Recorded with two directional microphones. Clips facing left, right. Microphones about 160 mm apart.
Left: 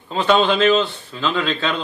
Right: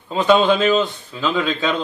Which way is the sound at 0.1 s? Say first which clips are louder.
Right 2 dB; 10° right (ahead or behind).